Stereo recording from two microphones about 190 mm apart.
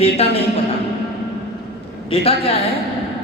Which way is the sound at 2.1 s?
30° left (ahead or behind).